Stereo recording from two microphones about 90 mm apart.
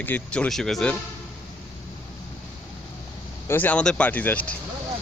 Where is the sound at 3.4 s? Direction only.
20° left (ahead or behind).